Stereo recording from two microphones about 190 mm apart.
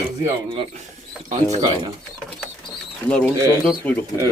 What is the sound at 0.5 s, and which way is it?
Speech, 25° right (ahead or behind).